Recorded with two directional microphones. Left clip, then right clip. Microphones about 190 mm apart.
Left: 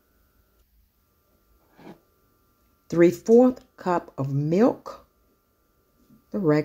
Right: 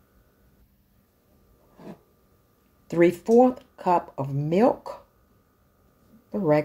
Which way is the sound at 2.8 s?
20° left (ahead or behind).